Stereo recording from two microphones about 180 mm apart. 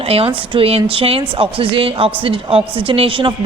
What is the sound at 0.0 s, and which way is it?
A woman's voice, 35° right (ahead or behind).